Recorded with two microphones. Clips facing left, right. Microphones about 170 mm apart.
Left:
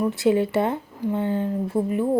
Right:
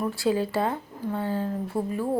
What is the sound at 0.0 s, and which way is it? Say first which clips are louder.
A woman's voice: left 5 dB; 20° left (ahead or behind).